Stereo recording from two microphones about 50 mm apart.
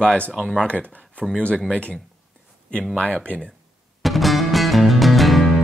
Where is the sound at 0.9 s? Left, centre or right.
Left.